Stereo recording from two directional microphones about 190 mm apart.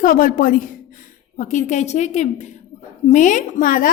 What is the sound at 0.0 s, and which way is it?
A woman's voice, 45° left (ahead or behind).